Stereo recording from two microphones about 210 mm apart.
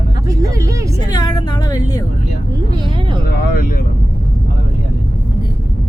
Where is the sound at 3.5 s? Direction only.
45° left (ahead or behind).